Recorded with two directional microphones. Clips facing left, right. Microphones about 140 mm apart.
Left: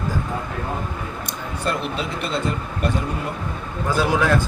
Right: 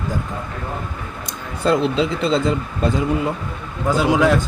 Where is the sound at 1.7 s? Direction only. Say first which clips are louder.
Right 8 dB; 90° right.